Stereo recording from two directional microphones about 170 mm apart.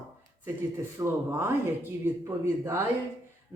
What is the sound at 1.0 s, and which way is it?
Speech, 15° right (ahead or behind).